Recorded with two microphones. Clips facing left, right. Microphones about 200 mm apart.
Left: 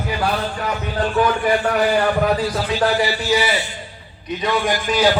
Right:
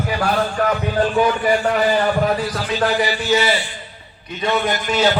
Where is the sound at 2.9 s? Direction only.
20° right (ahead or behind).